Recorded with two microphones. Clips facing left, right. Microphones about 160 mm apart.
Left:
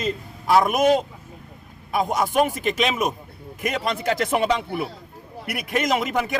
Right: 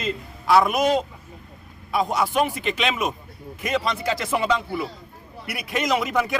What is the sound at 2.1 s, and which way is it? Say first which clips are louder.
Speech: left 3 dB; 45° left (ahead or behind).